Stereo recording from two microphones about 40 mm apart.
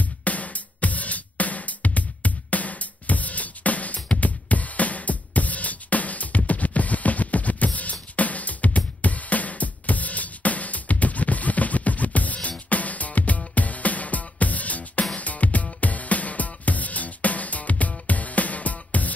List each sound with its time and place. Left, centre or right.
0.0 s music: left